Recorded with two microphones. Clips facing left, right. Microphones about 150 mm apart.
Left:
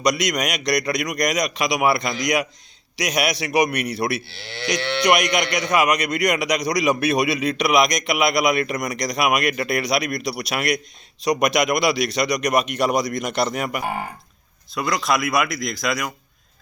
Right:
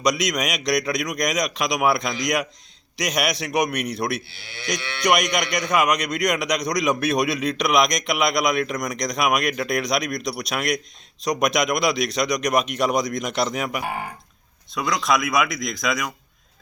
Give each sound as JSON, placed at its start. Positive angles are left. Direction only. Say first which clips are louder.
{"t": 0.0, "sound": "speech", "louder": "left 1 dB", "side_deg": 0}
{"t": 4.3, "sound": "speech", "louder": "left 6 dB", "side_deg": 70}
{"t": 5.0, "sound": "speech", "louder": "left 1 dB", "side_deg": 0}